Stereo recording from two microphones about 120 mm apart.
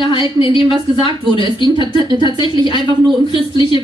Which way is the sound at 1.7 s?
40° right (ahead or behind).